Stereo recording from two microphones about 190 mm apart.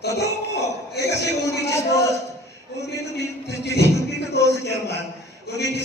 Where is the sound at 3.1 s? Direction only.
60° left (ahead or behind).